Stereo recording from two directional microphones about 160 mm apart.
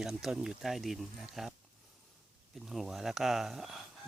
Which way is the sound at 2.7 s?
Centre (ahead or behind).